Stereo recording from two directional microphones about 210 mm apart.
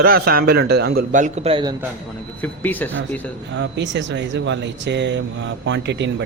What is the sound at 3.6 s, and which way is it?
Speech, 55° right (ahead or behind).